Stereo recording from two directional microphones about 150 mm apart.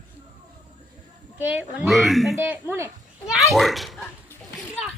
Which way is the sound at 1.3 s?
10° right (ahead or behind).